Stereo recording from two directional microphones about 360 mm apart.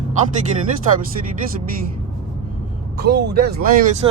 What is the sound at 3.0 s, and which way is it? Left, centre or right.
Speech, right.